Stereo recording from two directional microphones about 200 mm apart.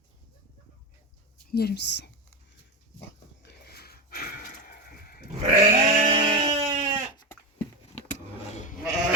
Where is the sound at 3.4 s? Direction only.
55° left (ahead or behind).